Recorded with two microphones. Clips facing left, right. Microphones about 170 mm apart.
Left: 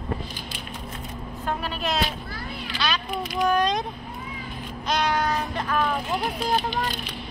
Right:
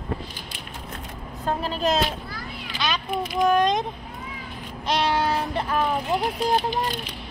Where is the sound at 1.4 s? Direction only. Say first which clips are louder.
Right 4 dB; 35° right (ahead or behind).